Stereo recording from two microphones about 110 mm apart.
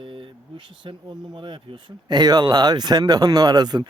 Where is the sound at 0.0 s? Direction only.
50° right (ahead or behind).